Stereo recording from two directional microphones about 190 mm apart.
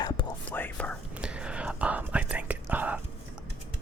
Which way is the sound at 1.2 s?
5° right (ahead or behind).